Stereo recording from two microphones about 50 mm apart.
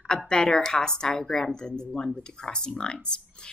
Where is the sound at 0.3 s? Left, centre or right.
Centre.